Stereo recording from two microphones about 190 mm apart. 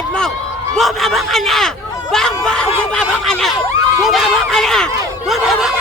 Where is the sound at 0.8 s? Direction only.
Centre (ahead or behind).